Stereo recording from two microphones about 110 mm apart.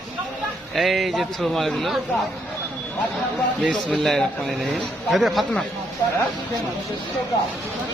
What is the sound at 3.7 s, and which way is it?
A man's voice, 10° left (ahead or behind).